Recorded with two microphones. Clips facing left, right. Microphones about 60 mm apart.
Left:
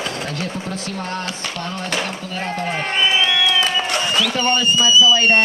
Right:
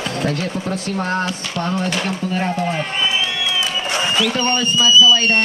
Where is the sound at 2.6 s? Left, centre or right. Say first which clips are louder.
Left 1 dB; left.